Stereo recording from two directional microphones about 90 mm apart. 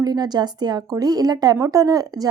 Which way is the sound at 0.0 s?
45° right (ahead or behind).